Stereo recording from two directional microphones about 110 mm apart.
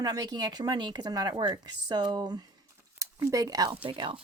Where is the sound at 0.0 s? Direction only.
35° right (ahead or behind).